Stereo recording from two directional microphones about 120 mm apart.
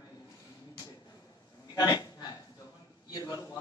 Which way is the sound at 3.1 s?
35° left (ahead or behind).